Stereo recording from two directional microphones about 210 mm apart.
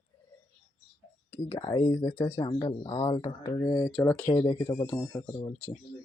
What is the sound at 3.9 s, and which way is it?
Speech, 5° left (ahead or behind).